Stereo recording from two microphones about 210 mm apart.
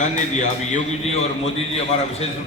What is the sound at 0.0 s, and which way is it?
A man's voice, 35° left (ahead or behind).